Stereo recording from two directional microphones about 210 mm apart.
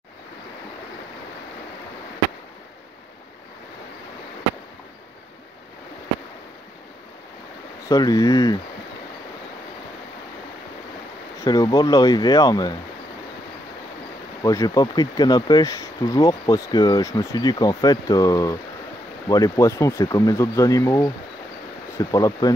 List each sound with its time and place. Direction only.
7.9 s speech: 15° left (ahead or behind)
11.3 s speech: 15° left (ahead or behind)
14.4 s speech: 15° left (ahead or behind)